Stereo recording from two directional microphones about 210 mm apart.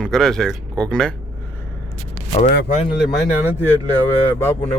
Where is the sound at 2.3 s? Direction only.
30° left (ahead or behind).